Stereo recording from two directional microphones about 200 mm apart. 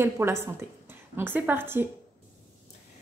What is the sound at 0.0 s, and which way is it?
A woman's voice, 10° right (ahead or behind).